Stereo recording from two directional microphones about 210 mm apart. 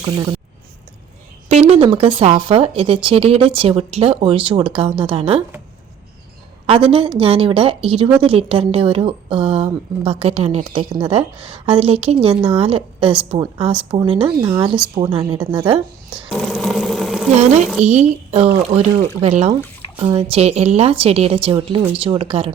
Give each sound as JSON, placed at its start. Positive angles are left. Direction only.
{"t": 1.5, "sound": "speech", "side_deg": -30}
{"t": 6.7, "sound": "speech", "side_deg": -25}
{"t": 16.3, "sound": "a sound", "side_deg": 0}
{"t": 17.8, "sound": "a woman's voice", "side_deg": -30}